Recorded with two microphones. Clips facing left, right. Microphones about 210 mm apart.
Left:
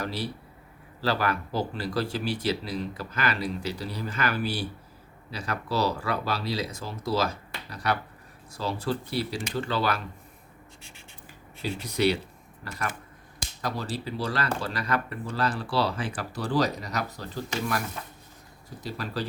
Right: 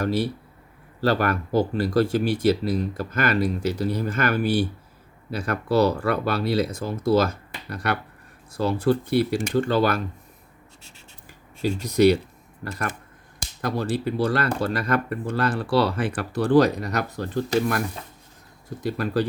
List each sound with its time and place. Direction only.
0.0 s speech: 50° right (ahead or behind)
11.8 s speech: 45° right (ahead or behind)
18.8 s speech: 55° right (ahead or behind)